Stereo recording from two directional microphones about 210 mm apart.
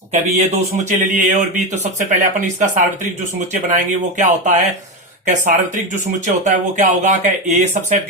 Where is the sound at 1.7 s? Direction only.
35° right (ahead or behind).